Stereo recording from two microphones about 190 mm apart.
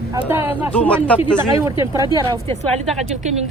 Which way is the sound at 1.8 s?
15° right (ahead or behind).